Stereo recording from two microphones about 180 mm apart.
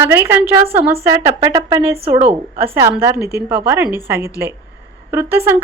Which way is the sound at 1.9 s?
35° right (ahead or behind).